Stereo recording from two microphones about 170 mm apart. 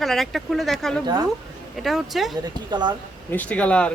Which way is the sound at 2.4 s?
25° right (ahead or behind).